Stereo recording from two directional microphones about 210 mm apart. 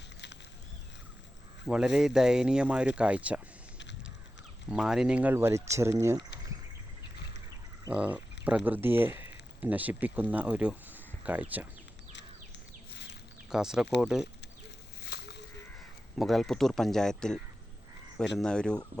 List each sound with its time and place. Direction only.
1.6 s speech: 5° right (ahead or behind)
4.7 s speech: 5° right (ahead or behind)
7.9 s speech: 5° right (ahead or behind)
12.9 s a sound: 55° left (ahead or behind)
13.5 s speech: 5° right (ahead or behind)
15.0 s a sound: 55° left (ahead or behind)
16.1 s speech: centre (ahead or behind)